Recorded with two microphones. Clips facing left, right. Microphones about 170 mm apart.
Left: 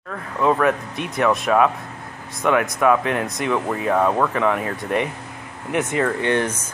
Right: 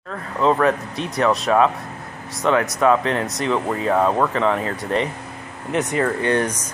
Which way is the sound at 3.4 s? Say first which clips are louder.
Right 1 dB; 15° right (ahead or behind).